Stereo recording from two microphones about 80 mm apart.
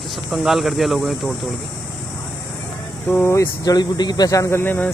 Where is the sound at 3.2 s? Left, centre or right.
Left.